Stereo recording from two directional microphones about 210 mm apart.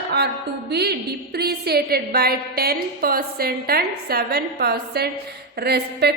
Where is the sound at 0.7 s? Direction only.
50° right (ahead or behind).